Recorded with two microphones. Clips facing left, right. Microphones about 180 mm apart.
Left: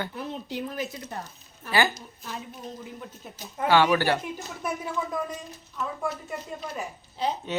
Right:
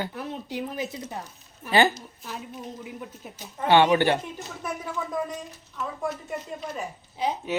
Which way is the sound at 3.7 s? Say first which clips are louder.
Right 2 dB; 25° right (ahead or behind).